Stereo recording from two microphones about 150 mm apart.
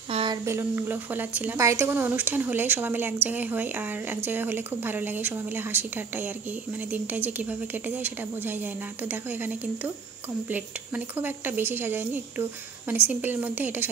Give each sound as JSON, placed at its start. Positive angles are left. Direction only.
{"t": 0.1, "sound": "a sound", "side_deg": -35}
{"t": 0.5, "sound": "a woman's voice", "side_deg": -15}
{"t": 11.1, "sound": "a woman's voice", "side_deg": -15}